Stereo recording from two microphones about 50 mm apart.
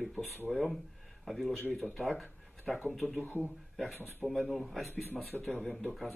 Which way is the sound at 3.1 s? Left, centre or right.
Left.